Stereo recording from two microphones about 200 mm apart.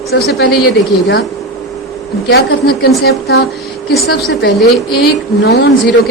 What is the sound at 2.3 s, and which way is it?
A woman's voice, 50° left (ahead or behind).